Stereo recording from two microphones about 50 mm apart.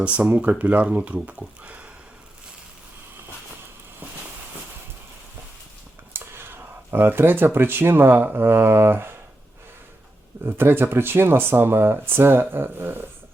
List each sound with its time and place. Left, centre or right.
0.0 s speech: right
6.1 s whispering: right
6.9 s speech: right
10.4 s speech: right